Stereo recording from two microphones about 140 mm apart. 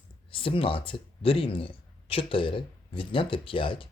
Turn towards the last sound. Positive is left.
turn(degrees=40)  # may be behind; listen again after turning